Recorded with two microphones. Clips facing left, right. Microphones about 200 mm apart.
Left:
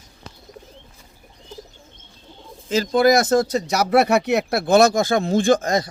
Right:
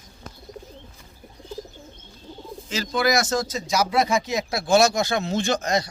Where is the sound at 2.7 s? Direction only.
50° left (ahead or behind).